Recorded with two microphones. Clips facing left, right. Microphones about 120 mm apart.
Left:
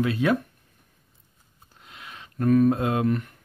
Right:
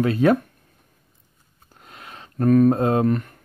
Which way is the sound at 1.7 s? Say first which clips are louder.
Right 3 dB; 45° right (ahead or behind).